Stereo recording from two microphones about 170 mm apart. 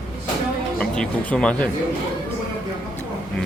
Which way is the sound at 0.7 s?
5° left (ahead or behind).